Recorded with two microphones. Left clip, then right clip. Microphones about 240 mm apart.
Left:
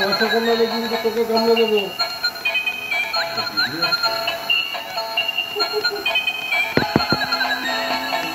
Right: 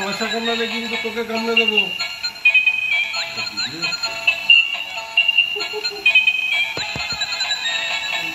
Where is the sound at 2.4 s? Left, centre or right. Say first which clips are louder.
Right 10 dB; centre.